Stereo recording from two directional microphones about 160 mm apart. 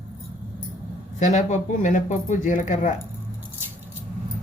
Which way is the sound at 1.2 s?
50° left (ahead or behind).